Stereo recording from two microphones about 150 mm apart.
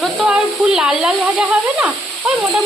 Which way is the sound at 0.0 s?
5° right (ahead or behind).